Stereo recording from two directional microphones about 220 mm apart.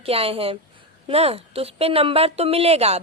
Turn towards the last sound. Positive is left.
turn(degrees=-30)  # may be behind; listen again after turning